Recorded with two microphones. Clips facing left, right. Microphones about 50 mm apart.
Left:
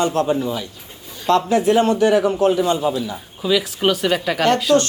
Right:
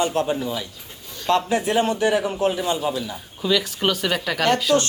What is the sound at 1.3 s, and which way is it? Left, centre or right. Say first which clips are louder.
Speech: left 5 dB; right.